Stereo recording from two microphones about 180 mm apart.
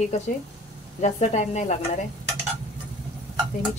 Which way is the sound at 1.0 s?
40° left (ahead or behind).